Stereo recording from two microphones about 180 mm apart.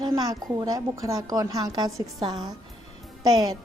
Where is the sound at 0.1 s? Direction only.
20° right (ahead or behind).